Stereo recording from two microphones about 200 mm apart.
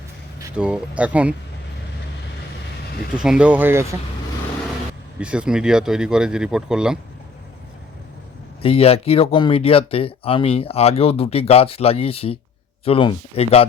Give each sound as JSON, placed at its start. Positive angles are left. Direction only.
{"t": 0.5, "sound": "speech", "side_deg": -5}
{"t": 3.2, "sound": "speech", "side_deg": -5}
{"t": 5.2, "sound": "speech", "side_deg": -5}
{"t": 8.6, "sound": "speech", "side_deg": 30}